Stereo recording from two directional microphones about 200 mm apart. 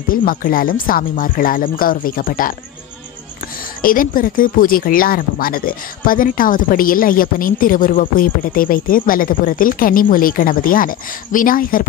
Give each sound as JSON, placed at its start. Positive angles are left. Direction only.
{"t": 0.1, "sound": "speech", "side_deg": 45}
{"t": 3.8, "sound": "speech", "side_deg": 45}